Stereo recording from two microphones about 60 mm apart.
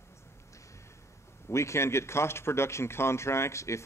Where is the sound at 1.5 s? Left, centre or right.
Left.